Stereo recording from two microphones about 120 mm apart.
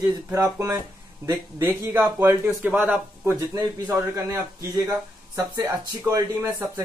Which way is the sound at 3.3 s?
25° right (ahead or behind).